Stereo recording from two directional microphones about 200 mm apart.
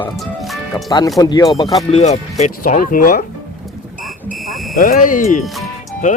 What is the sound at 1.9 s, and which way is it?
Speech, 35° left (ahead or behind).